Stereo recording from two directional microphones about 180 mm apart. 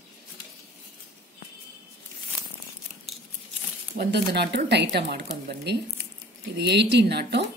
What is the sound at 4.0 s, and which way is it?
Speech, 70° right (ahead or behind).